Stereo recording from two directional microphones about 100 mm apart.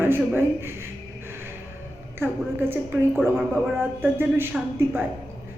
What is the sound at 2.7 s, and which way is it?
A man's voice, 20° right (ahead or behind).